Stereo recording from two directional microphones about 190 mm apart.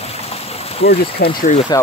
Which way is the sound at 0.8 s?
55° left (ahead or behind).